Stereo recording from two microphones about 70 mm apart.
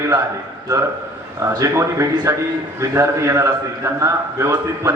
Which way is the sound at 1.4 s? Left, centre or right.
Right.